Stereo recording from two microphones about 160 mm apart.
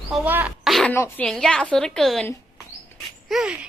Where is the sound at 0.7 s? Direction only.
Centre (ahead or behind).